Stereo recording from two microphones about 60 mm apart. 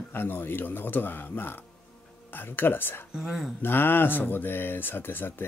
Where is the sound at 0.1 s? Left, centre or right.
Left.